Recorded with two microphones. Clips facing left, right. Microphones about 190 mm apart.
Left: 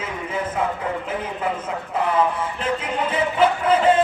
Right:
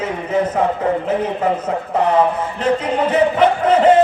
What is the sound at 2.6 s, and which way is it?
Music, 40° right (ahead or behind).